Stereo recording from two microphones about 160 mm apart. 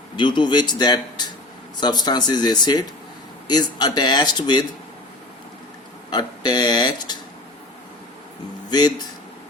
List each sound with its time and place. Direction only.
0.2 s speech: 30° left (ahead or behind)
6.1 s speech: 25° left (ahead or behind)
8.7 s speech: 25° left (ahead or behind)